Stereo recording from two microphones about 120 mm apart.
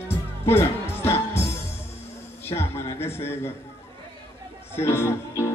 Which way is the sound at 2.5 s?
20° left (ahead or behind).